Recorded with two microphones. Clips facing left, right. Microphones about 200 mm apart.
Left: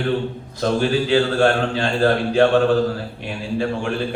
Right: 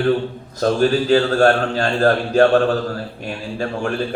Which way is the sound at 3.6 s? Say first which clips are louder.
Right 1 dB; 45° right (ahead or behind).